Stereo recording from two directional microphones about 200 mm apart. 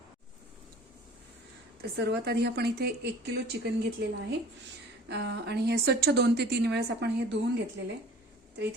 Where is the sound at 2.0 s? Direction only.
55° right (ahead or behind).